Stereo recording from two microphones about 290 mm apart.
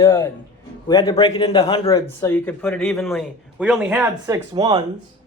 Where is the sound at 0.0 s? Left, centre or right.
Centre.